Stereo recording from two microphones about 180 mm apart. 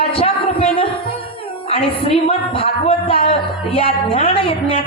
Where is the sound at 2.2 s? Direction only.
30° left (ahead or behind).